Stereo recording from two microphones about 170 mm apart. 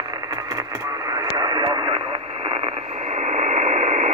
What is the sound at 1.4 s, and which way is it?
Radio, 30° right (ahead or behind).